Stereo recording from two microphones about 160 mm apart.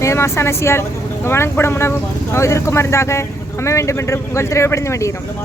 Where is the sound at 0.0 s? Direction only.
15° left (ahead or behind).